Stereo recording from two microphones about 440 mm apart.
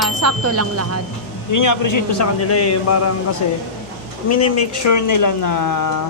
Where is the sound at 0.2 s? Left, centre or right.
Right.